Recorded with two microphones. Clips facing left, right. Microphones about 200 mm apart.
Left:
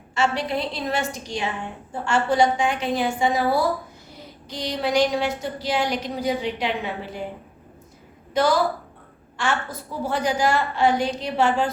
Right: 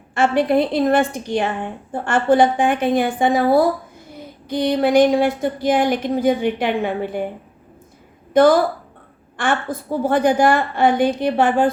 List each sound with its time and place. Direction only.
0.1 s a woman's voice: 55° right (ahead or behind)
8.3 s a woman's voice: 55° right (ahead or behind)